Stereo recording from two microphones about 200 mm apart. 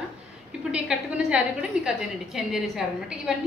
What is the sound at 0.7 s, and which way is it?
A woman's voice, 5° right (ahead or behind).